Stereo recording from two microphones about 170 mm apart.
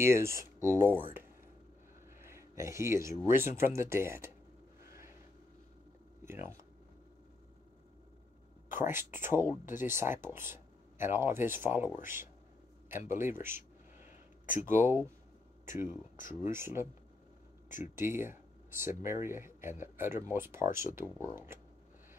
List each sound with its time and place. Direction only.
0.0 s speech: 15° right (ahead or behind)
2.2 s speech: 15° right (ahead or behind)
6.2 s speech: 15° right (ahead or behind)
8.7 s speech: 15° right (ahead or behind)
14.7 s speech: 15° right (ahead or behind)
17.9 s speech: 15° right (ahead or behind)